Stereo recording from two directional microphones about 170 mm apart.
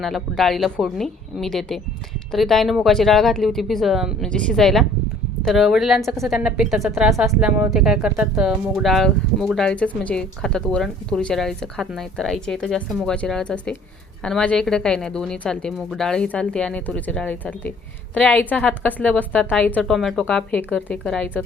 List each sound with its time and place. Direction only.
0.0 s a woman's voice: centre (ahead or behind)